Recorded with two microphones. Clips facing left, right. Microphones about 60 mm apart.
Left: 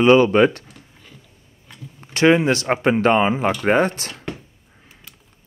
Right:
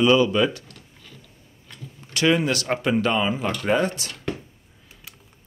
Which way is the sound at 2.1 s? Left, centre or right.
Left.